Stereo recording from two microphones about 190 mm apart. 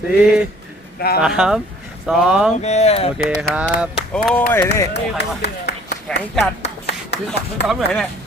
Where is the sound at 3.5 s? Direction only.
5° right (ahead or behind).